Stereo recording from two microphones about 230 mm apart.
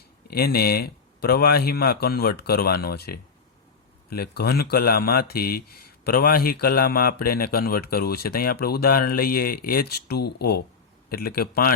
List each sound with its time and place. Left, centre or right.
0.3 s speech: left